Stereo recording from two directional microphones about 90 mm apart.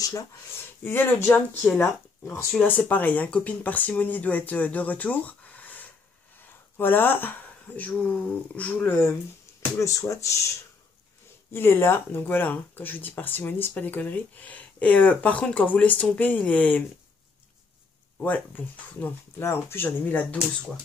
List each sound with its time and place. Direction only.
0.8 s speech: 20° left (ahead or behind)
9.8 s speech: 35° left (ahead or behind)
11.5 s speech: 25° left (ahead or behind)
18.2 s speech: 20° left (ahead or behind)